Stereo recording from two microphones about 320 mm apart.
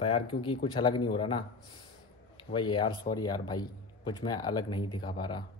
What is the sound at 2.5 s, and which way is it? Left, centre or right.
A man's voice, centre.